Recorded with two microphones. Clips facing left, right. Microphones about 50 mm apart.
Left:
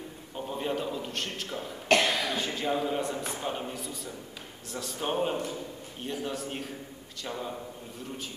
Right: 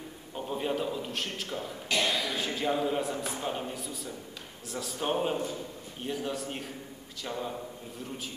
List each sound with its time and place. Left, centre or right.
0.4 s a man's voice: centre
1.9 s cough: left
2.3 s a man's voice: centre